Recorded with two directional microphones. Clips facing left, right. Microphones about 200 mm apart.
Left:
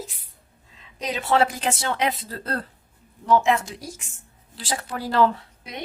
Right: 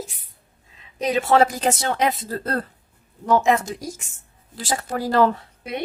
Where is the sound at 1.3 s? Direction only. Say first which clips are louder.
Right 2 dB; 40° right (ahead or behind).